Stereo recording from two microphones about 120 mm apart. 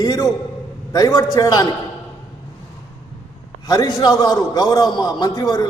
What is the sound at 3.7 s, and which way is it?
A man's voice, 30° left (ahead or behind).